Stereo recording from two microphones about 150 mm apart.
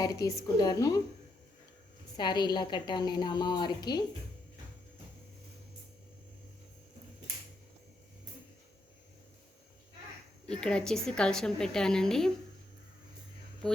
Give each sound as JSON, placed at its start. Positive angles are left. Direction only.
{"t": 0.0, "sound": "a woman's voice", "side_deg": 25}
{"t": 2.1, "sound": "a woman's voice", "side_deg": 30}
{"t": 10.5, "sound": "a woman's voice", "side_deg": 5}